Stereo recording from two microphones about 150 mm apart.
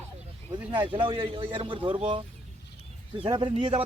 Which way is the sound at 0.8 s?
35° right (ahead or behind).